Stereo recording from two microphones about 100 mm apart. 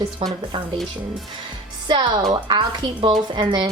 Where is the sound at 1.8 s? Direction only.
50° right (ahead or behind).